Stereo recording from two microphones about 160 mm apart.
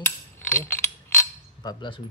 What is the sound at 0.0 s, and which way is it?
Cutlery, 15° left (ahead or behind).